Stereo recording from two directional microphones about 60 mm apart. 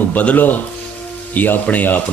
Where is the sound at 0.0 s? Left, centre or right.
Left.